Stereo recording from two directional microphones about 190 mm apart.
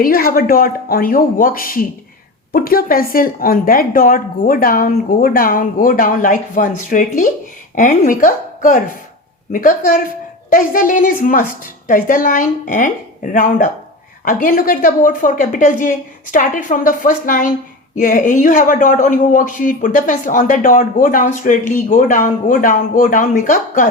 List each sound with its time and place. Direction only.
0.0 s speech: 50° left (ahead or behind)